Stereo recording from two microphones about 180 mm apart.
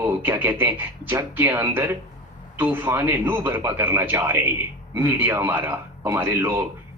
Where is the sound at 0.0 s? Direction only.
10° right (ahead or behind).